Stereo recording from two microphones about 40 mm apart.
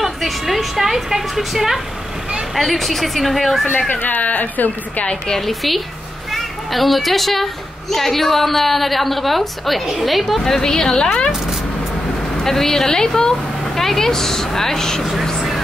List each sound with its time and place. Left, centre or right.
0.0 s a woman's voice: centre
4.0 s a woman's voice: left
5.4 s a woman's voice: centre
10.4 s speech: centre
12.4 s speech: centre